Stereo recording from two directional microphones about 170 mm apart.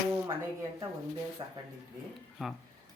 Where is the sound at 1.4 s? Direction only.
25° right (ahead or behind).